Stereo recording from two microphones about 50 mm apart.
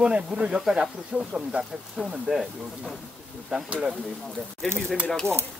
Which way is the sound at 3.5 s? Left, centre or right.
Right.